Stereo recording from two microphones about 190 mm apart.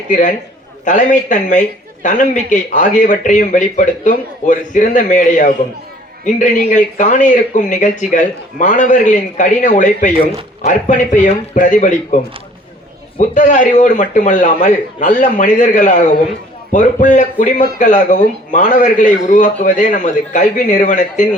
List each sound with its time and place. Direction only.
0.1 s a man's voice: 40° left (ahead or behind)
13.1 s speech: 40° left (ahead or behind)